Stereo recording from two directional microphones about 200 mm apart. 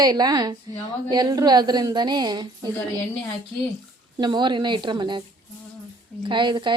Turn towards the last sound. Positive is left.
turn(degrees=-25)  # may be behind; listen again after turning